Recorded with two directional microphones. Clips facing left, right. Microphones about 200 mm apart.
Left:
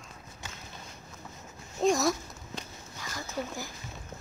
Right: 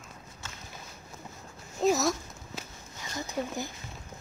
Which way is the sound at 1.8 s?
Centre (ahead or behind).